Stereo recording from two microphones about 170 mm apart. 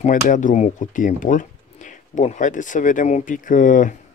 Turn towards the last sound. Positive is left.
turn(degrees=50)  # may be behind; listen again after turning